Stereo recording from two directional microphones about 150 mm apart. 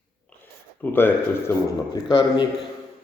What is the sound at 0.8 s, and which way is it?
Speech, 15° left (ahead or behind).